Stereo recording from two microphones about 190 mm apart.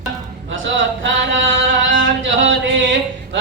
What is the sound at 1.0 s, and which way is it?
Chant, 85° right.